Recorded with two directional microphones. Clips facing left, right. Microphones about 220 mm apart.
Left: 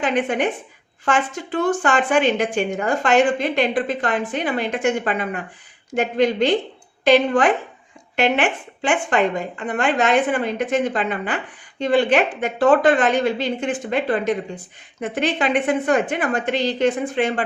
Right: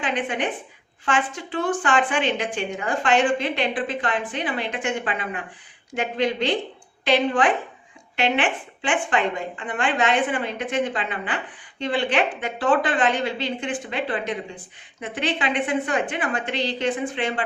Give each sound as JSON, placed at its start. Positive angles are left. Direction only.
{"t": 0.0, "sound": "a woman's voice", "side_deg": 45}